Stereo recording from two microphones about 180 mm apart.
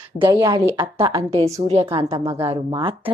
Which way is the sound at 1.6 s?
35° right (ahead or behind).